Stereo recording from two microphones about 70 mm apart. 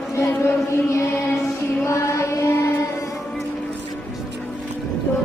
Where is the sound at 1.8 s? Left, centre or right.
Left.